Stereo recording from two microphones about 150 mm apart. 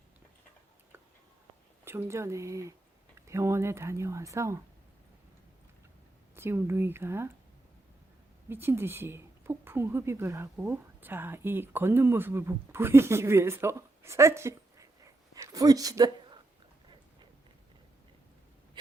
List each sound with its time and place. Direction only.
1.8 s speech: 15° right (ahead or behind)
6.3 s speech: 15° right (ahead or behind)
8.4 s speech: 15° right (ahead or behind)